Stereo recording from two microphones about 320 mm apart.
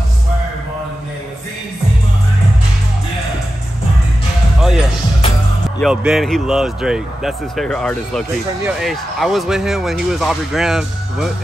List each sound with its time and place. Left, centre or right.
4.6 s basketball bounce: centre
5.8 s speech: centre